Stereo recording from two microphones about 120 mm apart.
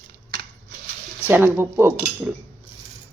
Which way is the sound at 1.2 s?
15° right (ahead or behind).